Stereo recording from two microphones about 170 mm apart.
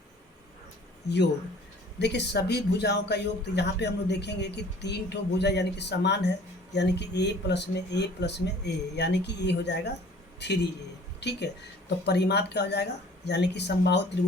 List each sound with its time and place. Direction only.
2.0 s speech: 85° left